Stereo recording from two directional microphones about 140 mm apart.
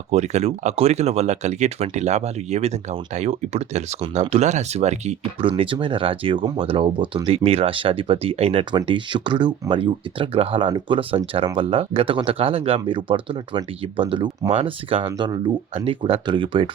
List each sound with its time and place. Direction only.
0.1 s speech: 55° right (ahead or behind)
8.7 s speech: 35° right (ahead or behind)